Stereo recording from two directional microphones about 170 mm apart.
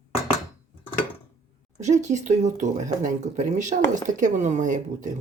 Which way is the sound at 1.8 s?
45° right (ahead or behind).